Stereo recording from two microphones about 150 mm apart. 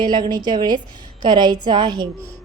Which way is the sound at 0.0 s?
30° right (ahead or behind).